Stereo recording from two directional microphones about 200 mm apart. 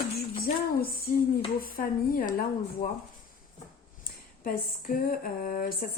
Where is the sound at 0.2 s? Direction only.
50° left (ahead or behind).